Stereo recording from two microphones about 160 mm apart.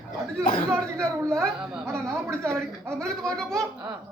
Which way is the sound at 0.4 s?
65° left (ahead or behind).